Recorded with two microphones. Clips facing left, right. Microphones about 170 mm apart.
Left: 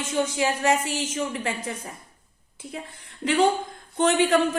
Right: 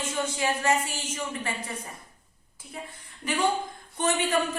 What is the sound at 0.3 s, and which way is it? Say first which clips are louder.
A woman's voice: even; 70° left (ahead or behind).